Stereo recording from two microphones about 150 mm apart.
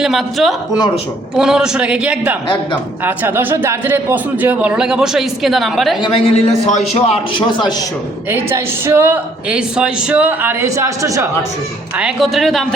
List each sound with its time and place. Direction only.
0.0 s a man's voice: centre (ahead or behind)
6.0 s a man's voice: 40° left (ahead or behind)
8.3 s a man's voice: 15° right (ahead or behind)
11.9 s a man's voice: 5° right (ahead or behind)